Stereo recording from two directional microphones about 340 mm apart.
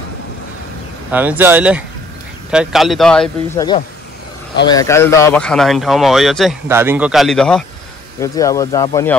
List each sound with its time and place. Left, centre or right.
1.1 s speech: centre